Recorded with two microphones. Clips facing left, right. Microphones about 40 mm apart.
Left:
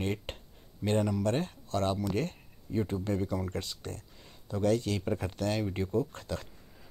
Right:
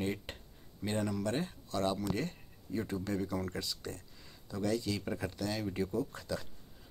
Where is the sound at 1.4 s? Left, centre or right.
Left.